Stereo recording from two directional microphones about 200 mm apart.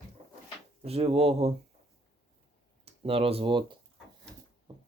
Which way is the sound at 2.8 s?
30° right (ahead or behind).